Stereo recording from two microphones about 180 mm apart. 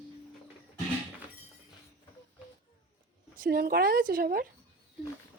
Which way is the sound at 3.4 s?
55° right (ahead or behind).